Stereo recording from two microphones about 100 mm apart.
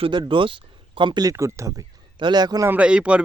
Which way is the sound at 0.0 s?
50° right (ahead or behind).